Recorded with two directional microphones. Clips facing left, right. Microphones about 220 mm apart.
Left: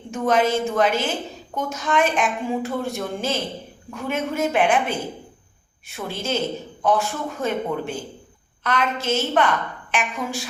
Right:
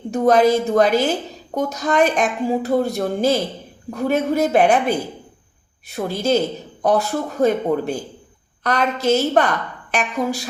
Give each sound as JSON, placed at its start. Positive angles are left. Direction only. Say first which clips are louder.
{"t": 0.1, "sound": "a woman's voice", "louder": "right 5 dB", "side_deg": -40}